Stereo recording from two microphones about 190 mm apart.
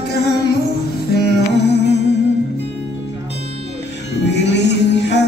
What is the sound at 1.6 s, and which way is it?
Music, 65° left (ahead or behind).